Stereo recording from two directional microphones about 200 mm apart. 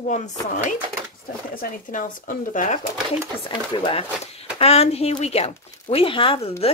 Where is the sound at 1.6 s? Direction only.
40° left (ahead or behind).